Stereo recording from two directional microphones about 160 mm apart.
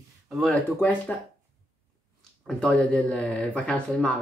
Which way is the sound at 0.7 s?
10° left (ahead or behind).